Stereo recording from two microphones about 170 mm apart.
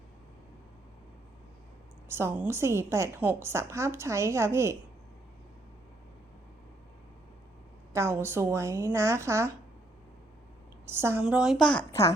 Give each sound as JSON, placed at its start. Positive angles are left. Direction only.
{"t": 2.0, "sound": "a woman's voice", "side_deg": -15}
{"t": 7.9, "sound": "a woman's voice", "side_deg": -15}
{"t": 10.8, "sound": "a woman's voice", "side_deg": -15}
{"t": 11.2, "sound": "speech", "side_deg": -5}
{"t": 11.9, "sound": "a child's voice", "side_deg": 20}